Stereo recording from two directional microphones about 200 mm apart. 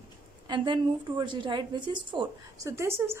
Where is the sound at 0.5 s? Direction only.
25° right (ahead or behind).